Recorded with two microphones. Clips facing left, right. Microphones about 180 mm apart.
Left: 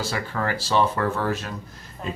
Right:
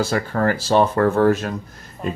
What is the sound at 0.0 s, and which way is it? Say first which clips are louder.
Speech: right 7 dB; 45° right (ahead or behind).